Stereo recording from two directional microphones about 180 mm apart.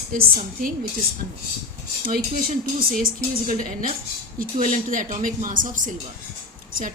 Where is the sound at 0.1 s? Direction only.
50° right (ahead or behind).